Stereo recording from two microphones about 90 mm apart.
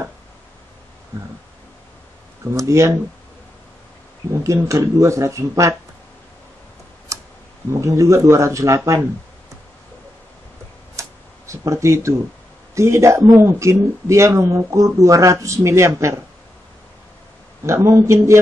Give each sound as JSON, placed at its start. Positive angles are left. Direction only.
{"t": 2.5, "sound": "speech", "side_deg": -35}
{"t": 4.4, "sound": "speech", "side_deg": -35}
{"t": 7.7, "sound": "speech", "side_deg": -35}
{"t": 11.0, "sound": "a sound", "side_deg": -35}
{"t": 12.7, "sound": "speech", "side_deg": -35}
{"t": 17.6, "sound": "speech", "side_deg": -35}